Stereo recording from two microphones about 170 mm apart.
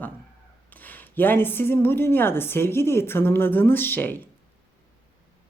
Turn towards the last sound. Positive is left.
turn(degrees=10)  # may be behind; listen again after turning